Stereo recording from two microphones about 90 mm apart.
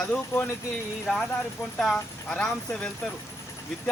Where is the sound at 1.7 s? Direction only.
10° left (ahead or behind).